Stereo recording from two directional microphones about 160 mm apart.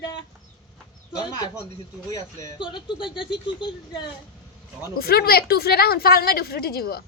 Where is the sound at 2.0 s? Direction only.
25° left (ahead or behind).